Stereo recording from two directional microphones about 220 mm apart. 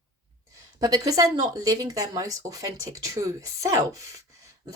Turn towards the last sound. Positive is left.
turn(degrees=-15)  # may be behind; listen again after turning